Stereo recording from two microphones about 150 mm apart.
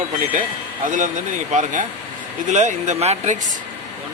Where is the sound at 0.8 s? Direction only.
55° right (ahead or behind).